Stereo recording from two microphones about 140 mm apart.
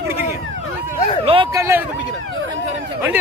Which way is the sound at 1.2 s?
40° right (ahead or behind).